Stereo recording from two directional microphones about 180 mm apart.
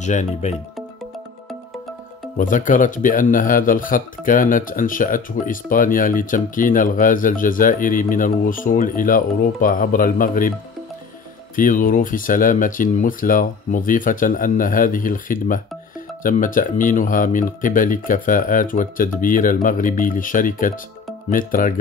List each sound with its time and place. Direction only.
0.0 s speech: 40° left (ahead or behind)
2.3 s speech: 45° left (ahead or behind)
11.5 s speech: 50° left (ahead or behind)